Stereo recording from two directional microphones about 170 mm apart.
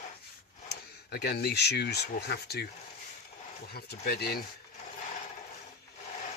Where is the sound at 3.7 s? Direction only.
65° left (ahead or behind).